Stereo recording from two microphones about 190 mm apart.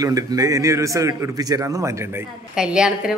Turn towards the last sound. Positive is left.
turn(degrees=-5)  # may be behind; listen again after turning